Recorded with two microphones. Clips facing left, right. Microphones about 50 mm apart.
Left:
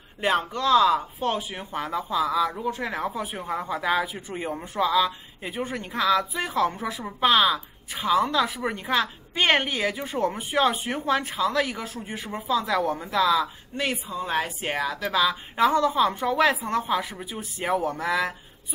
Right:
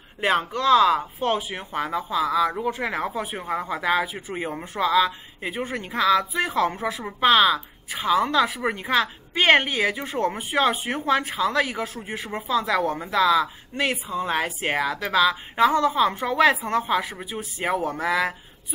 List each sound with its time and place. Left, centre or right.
0.2 s speech: centre
0.9 s speech: centre
4.7 s speech: centre
6.0 s speech: centre
10.0 s speech: centre
17.1 s speech: centre